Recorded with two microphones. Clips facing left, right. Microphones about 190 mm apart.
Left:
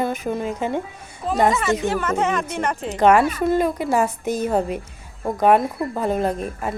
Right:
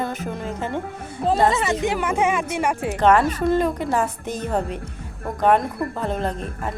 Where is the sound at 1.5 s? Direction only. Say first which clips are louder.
Left 1 dB; 20° right (ahead or behind).